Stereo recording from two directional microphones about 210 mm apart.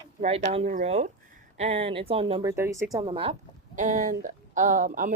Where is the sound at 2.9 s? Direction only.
25° right (ahead or behind).